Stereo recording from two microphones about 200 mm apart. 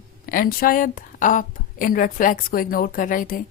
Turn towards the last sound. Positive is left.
turn(degrees=45)  # may be behind; listen again after turning